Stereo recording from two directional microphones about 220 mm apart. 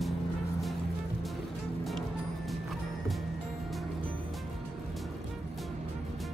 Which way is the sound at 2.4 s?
Centre (ahead or behind).